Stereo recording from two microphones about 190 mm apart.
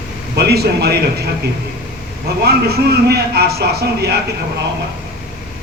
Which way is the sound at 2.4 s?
55° right (ahead or behind).